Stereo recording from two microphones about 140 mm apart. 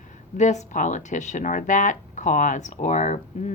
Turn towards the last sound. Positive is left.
turn(degrees=55)  # may be behind; listen again after turning